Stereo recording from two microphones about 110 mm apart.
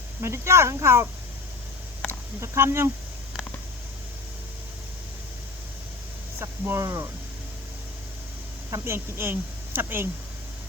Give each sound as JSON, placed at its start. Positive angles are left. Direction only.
{"t": 0.2, "sound": "speech", "side_deg": -25}
{"t": 2.4, "sound": "speech", "side_deg": -25}
{"t": 6.4, "sound": "speech", "side_deg": -25}
{"t": 8.7, "sound": "speech", "side_deg": -20}